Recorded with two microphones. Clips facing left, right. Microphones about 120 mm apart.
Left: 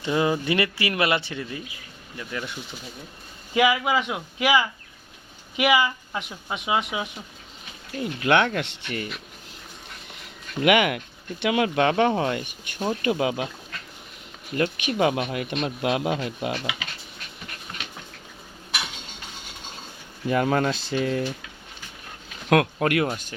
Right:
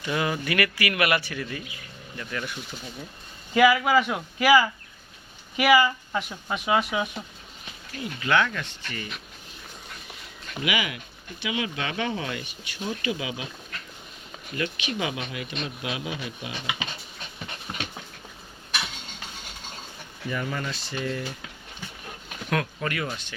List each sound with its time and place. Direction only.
0.0 s speech: 25° left (ahead or behind)
8.2 s speech: 60° left (ahead or behind)
10.6 s speech: 60° left (ahead or behind)
14.5 s speech: 50° left (ahead or behind)
20.3 s speech: 70° left (ahead or behind)
22.4 s speech: 65° left (ahead or behind)
23.0 s speech: 45° left (ahead or behind)